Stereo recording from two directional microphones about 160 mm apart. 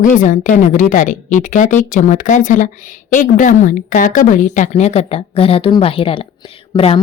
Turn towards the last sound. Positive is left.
turn(degrees=35)  # may be behind; listen again after turning